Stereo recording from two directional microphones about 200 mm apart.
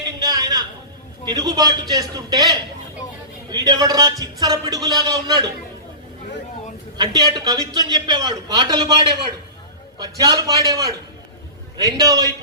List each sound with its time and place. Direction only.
0.2 s a sound: 20° right (ahead or behind)
1.3 s speech: 20° right (ahead or behind)
6.9 s speech: 20° right (ahead or behind)
10.0 s a man's voice: 20° right (ahead or behind)